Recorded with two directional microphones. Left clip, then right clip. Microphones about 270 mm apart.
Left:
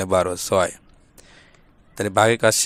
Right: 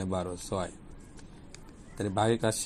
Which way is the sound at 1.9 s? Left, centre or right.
Left.